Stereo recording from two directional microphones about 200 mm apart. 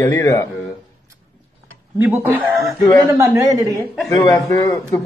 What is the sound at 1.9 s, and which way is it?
Speech, 10° right (ahead or behind).